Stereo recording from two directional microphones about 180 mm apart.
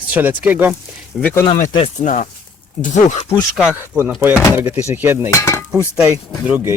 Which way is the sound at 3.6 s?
10° right (ahead or behind).